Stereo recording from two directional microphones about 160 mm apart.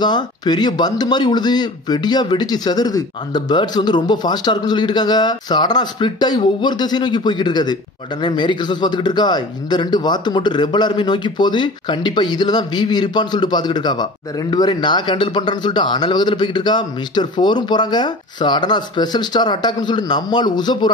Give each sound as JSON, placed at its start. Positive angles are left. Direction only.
{"t": 0.0, "sound": "speech", "side_deg": 25}